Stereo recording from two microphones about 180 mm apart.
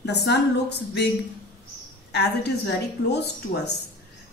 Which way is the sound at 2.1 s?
70° left (ahead or behind).